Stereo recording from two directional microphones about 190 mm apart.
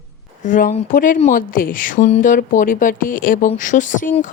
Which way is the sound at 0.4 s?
40° left (ahead or behind).